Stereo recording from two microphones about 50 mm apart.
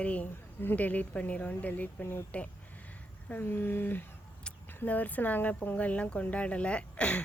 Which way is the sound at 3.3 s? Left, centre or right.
Left.